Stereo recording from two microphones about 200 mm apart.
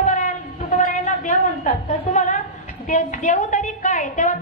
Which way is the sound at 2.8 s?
40° left (ahead or behind).